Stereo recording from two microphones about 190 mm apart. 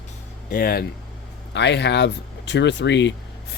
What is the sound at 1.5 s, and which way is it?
Speech, 65° left (ahead or behind).